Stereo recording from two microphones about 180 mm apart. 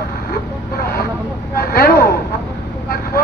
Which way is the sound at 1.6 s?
55° left (ahead or behind).